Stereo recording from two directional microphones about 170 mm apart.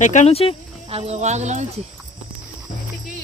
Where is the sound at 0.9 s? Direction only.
35° right (ahead or behind).